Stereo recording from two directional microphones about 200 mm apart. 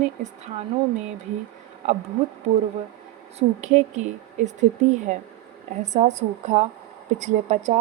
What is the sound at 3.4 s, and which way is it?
Speech, 35° right (ahead or behind).